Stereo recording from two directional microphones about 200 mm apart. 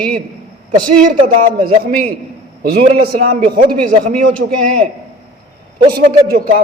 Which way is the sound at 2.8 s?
40° right (ahead or behind).